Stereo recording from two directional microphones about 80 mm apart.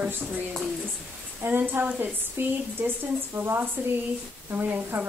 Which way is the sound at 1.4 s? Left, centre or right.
Right.